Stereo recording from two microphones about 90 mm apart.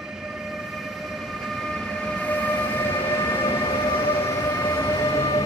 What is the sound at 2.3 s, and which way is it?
Train, 15° left (ahead or behind).